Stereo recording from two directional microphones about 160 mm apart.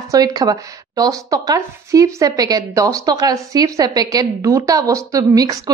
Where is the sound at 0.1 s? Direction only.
25° right (ahead or behind).